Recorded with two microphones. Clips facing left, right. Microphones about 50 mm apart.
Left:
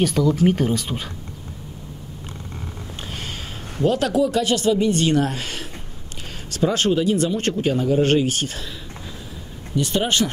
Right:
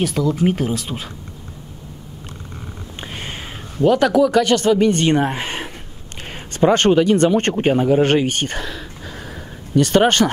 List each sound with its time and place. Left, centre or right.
0.0 s speech: centre
3.0 s a sound: right
3.8 s speech: right
4.1 s speech: right
5.1 s speech: right
6.2 s a sound: right
6.7 s speech: right
9.8 s speech: right